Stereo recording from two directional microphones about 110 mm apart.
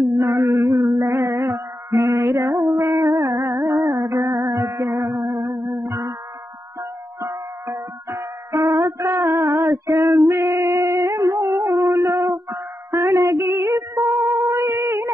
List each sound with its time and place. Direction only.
0.2 s female singing: 25° right (ahead or behind)
1.0 s a sound: 25° right (ahead or behind)
2.7 s music: 30° right (ahead or behind)
5.4 s music: 40° right (ahead or behind)
6.8 s music: 25° right (ahead or behind)